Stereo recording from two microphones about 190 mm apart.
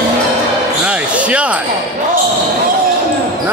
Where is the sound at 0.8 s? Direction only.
5° right (ahead or behind).